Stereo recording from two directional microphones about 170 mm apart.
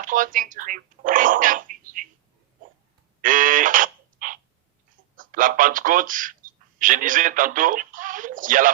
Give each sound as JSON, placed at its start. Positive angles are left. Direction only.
{"t": 0.0, "sound": "speech", "side_deg": -50}
{"t": 3.2, "sound": "a sound", "side_deg": -50}
{"t": 5.1, "sound": "speech", "side_deg": -50}